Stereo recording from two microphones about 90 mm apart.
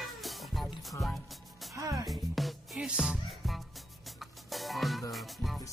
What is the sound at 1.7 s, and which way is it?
Music, 40° right (ahead or behind).